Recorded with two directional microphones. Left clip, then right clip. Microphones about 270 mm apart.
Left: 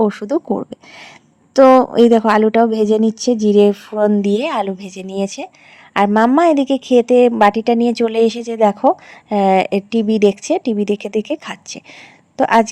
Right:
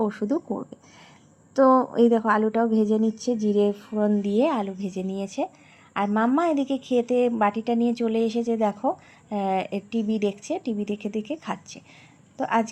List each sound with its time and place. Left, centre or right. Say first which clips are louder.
0.0 s a woman's voice: left 9 dB; left